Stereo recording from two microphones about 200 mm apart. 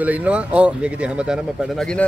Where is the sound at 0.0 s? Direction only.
5° right (ahead or behind).